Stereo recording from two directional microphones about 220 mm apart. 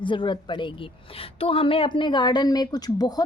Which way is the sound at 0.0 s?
20° left (ahead or behind).